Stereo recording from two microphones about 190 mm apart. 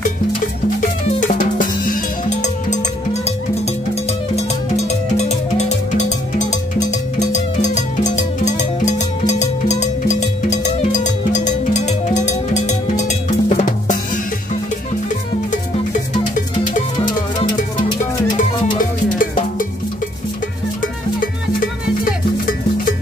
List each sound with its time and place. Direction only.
0.7 s drum: 40° left (ahead or behind)
4.4 s music: 35° left (ahead or behind)
18.3 s music: 45° left (ahead or behind)